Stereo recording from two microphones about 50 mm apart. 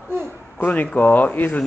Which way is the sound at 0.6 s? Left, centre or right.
Left.